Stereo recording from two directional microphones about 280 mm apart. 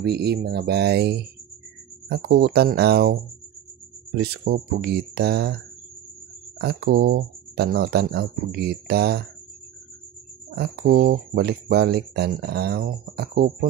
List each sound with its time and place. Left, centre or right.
0.0 s speech: right
4.2 s speech: right
6.6 s speech: right
10.5 s speech: right